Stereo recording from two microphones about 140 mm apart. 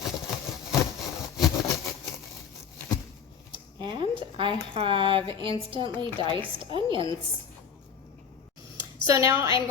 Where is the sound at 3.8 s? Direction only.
35° right (ahead or behind).